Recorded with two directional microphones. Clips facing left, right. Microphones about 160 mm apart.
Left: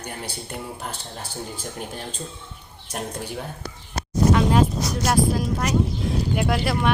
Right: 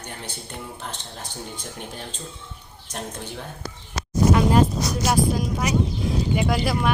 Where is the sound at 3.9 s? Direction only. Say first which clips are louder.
Left 2 dB; 55° left (ahead or behind).